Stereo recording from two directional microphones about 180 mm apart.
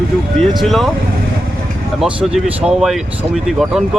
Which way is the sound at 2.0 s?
Centre (ahead or behind).